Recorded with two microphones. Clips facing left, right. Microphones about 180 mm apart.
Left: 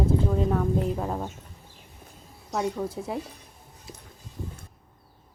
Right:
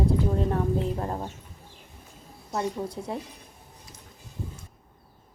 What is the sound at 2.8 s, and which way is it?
Speech, 5° left (ahead or behind).